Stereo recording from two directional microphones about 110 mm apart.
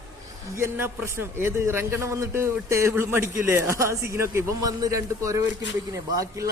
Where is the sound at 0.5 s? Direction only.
25° right (ahead or behind).